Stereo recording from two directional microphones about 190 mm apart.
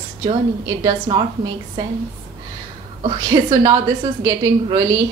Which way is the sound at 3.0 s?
25° right (ahead or behind).